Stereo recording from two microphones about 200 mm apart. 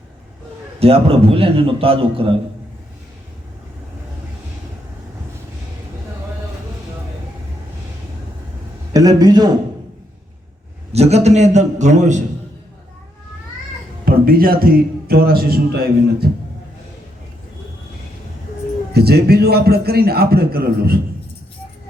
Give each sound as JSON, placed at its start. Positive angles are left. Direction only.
{"t": 0.8, "sound": "a man's voice", "side_deg": -30}
{"t": 8.9, "sound": "a man's voice", "side_deg": -20}
{"t": 10.9, "sound": "a man's voice", "side_deg": -30}
{"t": 14.0, "sound": "a man's voice", "side_deg": -45}
{"t": 18.9, "sound": "a man's voice", "side_deg": -50}